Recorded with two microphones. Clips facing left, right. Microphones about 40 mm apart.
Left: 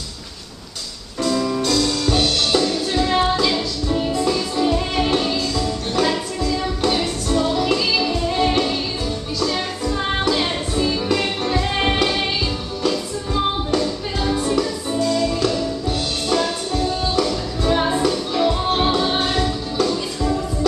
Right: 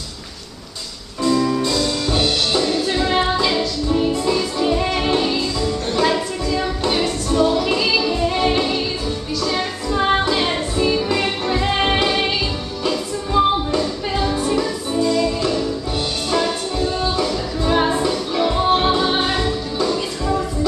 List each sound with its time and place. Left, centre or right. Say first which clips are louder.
1.3 s music: right 4 dB; centre
1.7 s music: left 1 dB; right
14.2 s music: left 1 dB; centre
14.6 s music: right 1 dB; centre
17.0 s music: even; right